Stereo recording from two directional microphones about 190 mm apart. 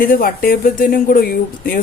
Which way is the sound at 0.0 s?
50° left (ahead or behind).